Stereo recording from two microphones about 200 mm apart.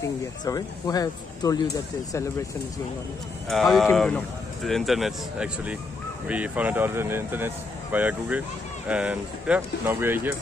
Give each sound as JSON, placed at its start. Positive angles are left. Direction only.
{"t": 0.0, "sound": "speech", "side_deg": 20}
{"t": 3.4, "sound": "speech", "side_deg": 0}